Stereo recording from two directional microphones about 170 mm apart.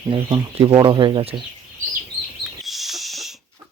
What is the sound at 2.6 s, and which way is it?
Owl, centre (ahead or behind).